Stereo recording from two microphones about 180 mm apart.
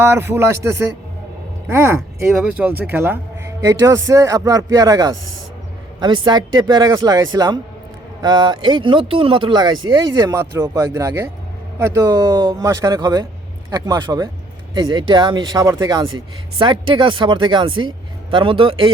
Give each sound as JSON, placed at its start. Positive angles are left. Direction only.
{"t": 0.0, "sound": "speech", "side_deg": -15}
{"t": 2.3, "sound": "speech", "side_deg": -5}